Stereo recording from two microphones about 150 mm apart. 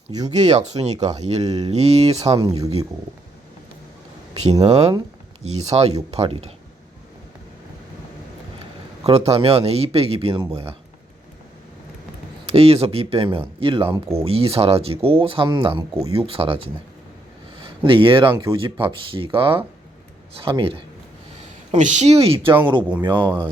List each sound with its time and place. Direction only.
0.3 s speech: 50° right (ahead or behind)
2.4 s speech: 25° right (ahead or behind)
4.6 s speech: 45° right (ahead or behind)
9.0 s speech: 40° right (ahead or behind)
12.5 s speech: 40° right (ahead or behind)
21.7 s speech: 55° right (ahead or behind); by 23.5 s 30° right (ahead or behind)